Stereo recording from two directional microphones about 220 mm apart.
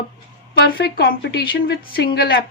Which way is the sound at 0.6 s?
45° left (ahead or behind).